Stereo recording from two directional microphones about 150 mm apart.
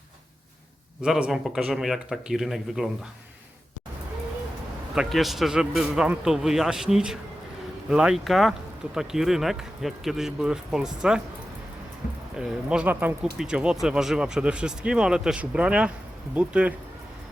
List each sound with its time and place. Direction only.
1.0 s speech: 5° right (ahead or behind)
4.9 s speech: centre (ahead or behind)
12.4 s speech: 5° right (ahead or behind)